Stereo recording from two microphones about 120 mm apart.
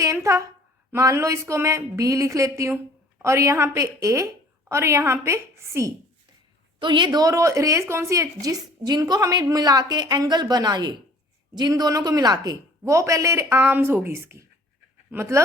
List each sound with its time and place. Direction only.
0.0 s a sound: 25° right (ahead or behind)
0.9 s a woman's voice: 25° right (ahead or behind)
6.7 s a woman's voice: 40° right (ahead or behind); by 15.4 s 20° right (ahead or behind)